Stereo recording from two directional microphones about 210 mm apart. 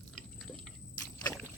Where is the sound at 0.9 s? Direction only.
15° left (ahead or behind).